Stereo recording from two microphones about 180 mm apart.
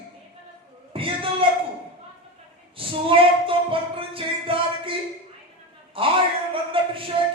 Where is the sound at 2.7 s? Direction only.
30° right (ahead or behind).